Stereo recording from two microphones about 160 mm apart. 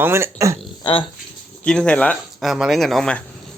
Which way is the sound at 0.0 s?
15° right (ahead or behind).